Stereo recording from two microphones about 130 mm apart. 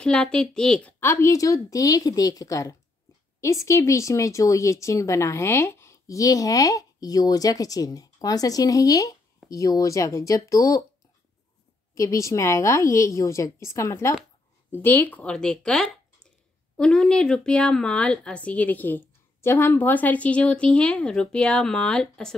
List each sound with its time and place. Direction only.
0.0 s a woman's voice: 5° left (ahead or behind)
0.9 s speech: 20° left (ahead or behind)
11.9 s a woman's voice: 25° left (ahead or behind); by 22.3 s 5° left (ahead or behind)